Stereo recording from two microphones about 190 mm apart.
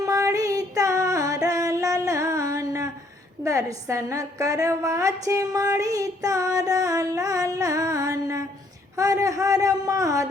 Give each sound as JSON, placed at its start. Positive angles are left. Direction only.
{"t": 0.0, "sound": "music", "side_deg": -15}
{"t": 3.4, "sound": "a woman's voice", "side_deg": -15}